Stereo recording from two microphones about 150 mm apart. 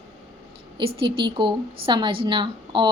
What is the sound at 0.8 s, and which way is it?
Speech, 35° right (ahead or behind).